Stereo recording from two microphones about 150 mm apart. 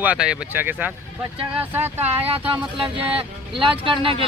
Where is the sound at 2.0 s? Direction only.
40° right (ahead or behind).